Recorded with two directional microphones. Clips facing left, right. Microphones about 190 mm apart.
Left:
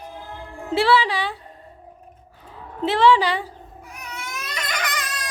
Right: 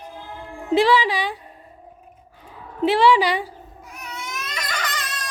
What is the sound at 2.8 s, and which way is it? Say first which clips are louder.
Speech: right 1 dB; 15° right (ahead or behind).